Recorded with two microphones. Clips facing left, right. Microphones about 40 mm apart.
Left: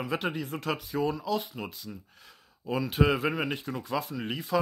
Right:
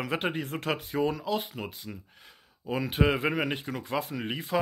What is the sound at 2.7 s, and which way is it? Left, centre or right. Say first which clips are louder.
Speech: even; right.